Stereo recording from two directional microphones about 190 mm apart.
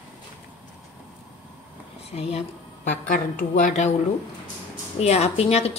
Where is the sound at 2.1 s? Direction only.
30° left (ahead or behind).